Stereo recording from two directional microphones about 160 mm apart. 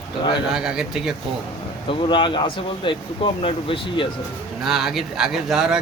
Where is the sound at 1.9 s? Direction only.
30° left (ahead or behind).